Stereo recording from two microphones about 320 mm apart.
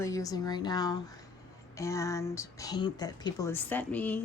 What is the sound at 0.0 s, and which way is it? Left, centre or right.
Speech, centre.